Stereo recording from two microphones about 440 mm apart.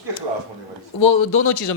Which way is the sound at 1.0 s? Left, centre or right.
Left.